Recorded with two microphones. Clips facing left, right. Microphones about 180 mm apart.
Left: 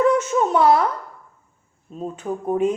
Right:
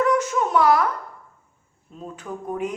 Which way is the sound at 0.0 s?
25° left (ahead or behind).